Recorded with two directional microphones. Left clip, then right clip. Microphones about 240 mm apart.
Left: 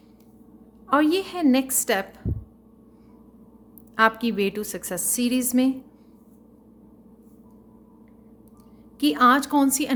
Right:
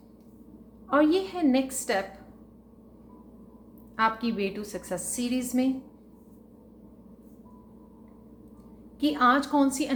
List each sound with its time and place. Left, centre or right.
0.9 s a woman's voice: left
3.9 s a woman's voice: left
9.0 s a woman's voice: left